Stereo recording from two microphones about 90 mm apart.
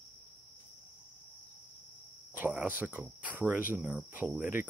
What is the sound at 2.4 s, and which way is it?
Speech, 15° right (ahead or behind).